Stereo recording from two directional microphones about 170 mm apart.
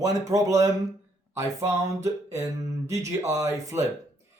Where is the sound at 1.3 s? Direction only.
15° right (ahead or behind).